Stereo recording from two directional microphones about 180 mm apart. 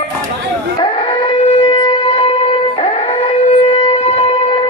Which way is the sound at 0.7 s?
30° left (ahead or behind).